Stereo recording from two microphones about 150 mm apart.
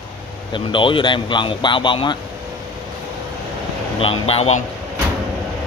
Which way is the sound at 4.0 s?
40° left (ahead or behind).